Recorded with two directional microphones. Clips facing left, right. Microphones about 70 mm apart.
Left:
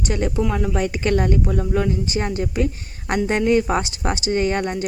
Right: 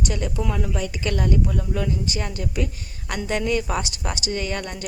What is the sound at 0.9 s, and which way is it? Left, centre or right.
Speech, left.